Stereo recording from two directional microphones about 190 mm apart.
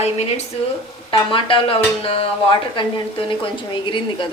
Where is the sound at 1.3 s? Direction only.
30° left (ahead or behind).